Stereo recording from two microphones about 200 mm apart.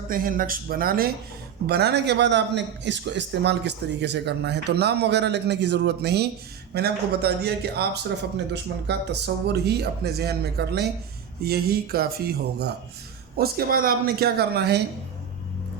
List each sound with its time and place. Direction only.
0.1 s a man's voice: 45° right (ahead or behind)